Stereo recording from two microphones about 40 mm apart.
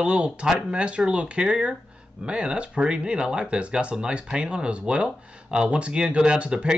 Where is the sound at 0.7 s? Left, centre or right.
Right.